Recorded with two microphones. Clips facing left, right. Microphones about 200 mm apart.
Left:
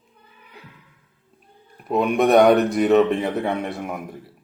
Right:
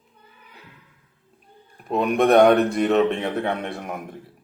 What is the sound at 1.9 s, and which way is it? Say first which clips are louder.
A man's voice: left 1 dB; centre (ahead or behind).